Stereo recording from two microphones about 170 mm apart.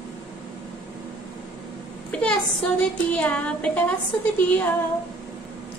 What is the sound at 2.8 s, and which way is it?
A woman's voice, 5° left (ahead or behind).